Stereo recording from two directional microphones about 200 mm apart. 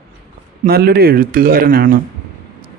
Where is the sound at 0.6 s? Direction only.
50° right (ahead or behind).